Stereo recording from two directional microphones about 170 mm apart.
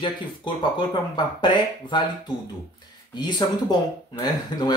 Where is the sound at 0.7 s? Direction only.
25° left (ahead or behind).